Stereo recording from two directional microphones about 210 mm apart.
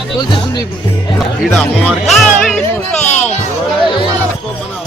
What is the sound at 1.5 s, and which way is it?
Speech, centre (ahead or behind).